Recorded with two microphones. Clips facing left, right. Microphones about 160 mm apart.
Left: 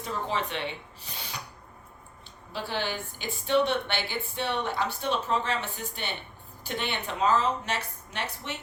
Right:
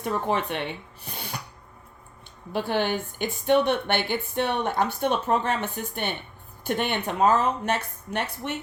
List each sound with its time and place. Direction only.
0.0 s speech: 55° right (ahead or behind)
1.0 s filing: 55° right (ahead or behind)
2.5 s speech: 55° right (ahead or behind)